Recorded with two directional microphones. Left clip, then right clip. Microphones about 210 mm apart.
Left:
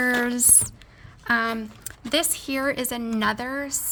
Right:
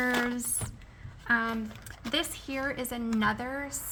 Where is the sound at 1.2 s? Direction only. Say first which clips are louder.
Left 5 dB; 55° left (ahead or behind).